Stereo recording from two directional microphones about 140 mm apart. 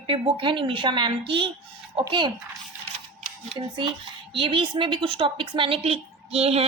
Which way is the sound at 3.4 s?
35° right (ahead or behind).